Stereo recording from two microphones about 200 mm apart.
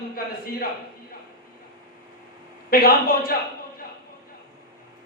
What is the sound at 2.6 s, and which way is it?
Speech, 50° left (ahead or behind).